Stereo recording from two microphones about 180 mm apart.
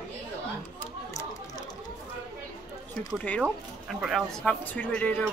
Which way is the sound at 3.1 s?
5° left (ahead or behind).